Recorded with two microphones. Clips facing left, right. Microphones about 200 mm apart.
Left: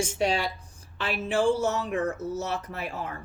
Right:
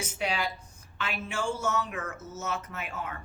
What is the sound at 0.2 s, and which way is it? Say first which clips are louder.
Speech: left 2 dB; 30° left (ahead or behind).